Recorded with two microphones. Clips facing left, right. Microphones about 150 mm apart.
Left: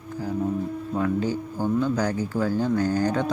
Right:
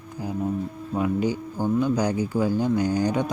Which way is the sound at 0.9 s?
15° right (ahead or behind).